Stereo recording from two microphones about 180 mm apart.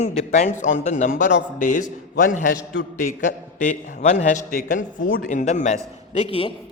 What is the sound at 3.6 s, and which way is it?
A man's voice, 40° left (ahead or behind).